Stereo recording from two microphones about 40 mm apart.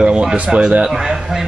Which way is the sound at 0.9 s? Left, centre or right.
Centre.